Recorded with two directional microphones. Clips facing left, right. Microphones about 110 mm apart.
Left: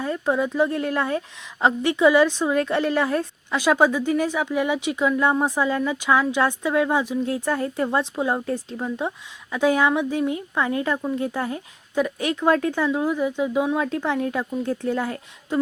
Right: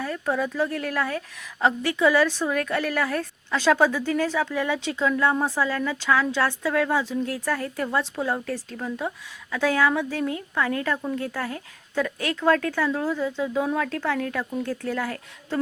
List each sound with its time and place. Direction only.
0.0 s a woman's voice: 20° left (ahead or behind)